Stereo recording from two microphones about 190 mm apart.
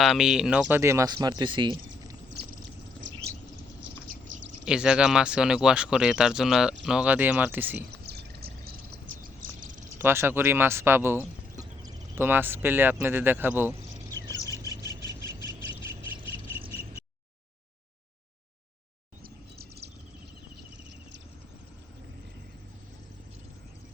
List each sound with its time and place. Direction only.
0.0 s speech: centre (ahead or behind); by 1.7 s 25° right (ahead or behind)
2.3 s pour: 55° right (ahead or behind)
3.0 s a sound: 75° right (ahead or behind)
4.6 s speech: 5° right (ahead or behind)
8.0 s bird: 55° right (ahead or behind)
10.0 s speech: 10° right (ahead or behind)
14.4 s bird: 20° right (ahead or behind)
19.2 s chirp: 55° right (ahead or behind)